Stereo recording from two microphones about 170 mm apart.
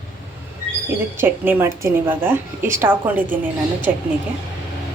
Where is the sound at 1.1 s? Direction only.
10° right (ahead or behind).